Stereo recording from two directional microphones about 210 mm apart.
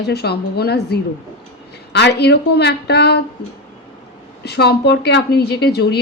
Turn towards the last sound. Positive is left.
turn(degrees=50)  # may be behind; listen again after turning